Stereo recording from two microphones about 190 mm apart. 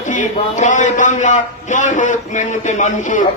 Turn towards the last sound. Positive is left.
turn(degrees=40)  # may be behind; listen again after turning